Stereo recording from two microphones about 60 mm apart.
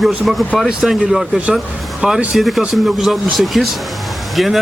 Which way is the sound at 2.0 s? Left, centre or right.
Centre.